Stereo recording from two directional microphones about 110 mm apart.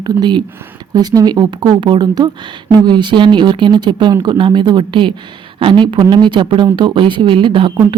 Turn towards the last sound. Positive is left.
turn(degrees=-50)  # may be behind; listen again after turning